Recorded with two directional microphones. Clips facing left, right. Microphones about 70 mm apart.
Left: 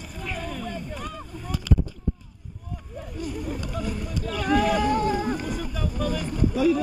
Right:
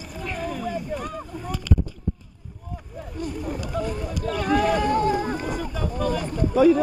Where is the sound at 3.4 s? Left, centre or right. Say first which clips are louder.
Right 3 dB; centre.